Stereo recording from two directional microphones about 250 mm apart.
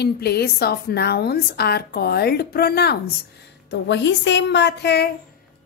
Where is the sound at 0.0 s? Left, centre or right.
Left.